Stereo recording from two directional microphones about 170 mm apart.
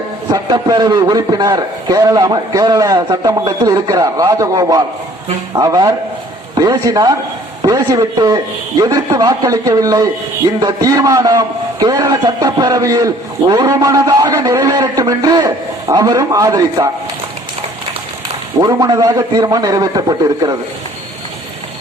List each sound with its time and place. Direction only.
0.3 s a man's voice: 25° right (ahead or behind)
18.6 s a man's voice: 20° right (ahead or behind)